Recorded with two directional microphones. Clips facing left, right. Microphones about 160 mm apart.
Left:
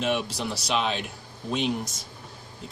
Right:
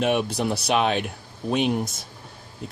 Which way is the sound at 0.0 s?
55° right (ahead or behind).